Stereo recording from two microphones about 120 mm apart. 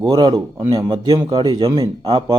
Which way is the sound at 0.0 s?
35° right (ahead or behind).